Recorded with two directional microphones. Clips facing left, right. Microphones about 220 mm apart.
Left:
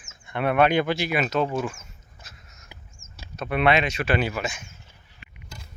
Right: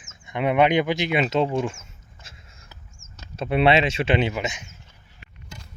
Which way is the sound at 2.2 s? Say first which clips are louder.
Right 2 dB; 25° right (ahead or behind).